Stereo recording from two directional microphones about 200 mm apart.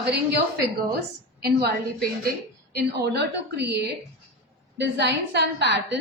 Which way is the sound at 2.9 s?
55° right (ahead or behind).